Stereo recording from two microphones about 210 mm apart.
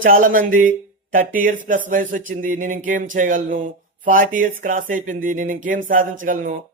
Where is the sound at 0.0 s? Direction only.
40° right (ahead or behind).